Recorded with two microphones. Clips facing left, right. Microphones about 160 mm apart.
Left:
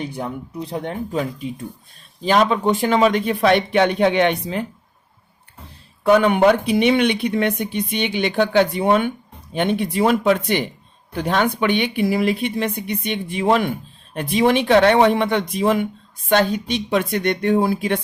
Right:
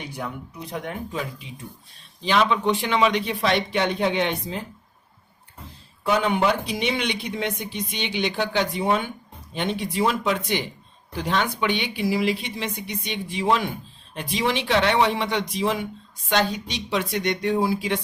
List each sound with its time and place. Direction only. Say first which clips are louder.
0.0 s speech: left 6 dB; 30° left (ahead or behind); by 4.6 s 65° left (ahead or behind)
6.0 s speech: left 7 dB; 60° left (ahead or behind)